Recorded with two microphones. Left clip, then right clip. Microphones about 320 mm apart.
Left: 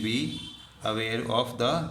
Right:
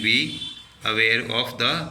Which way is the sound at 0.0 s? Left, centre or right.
Left.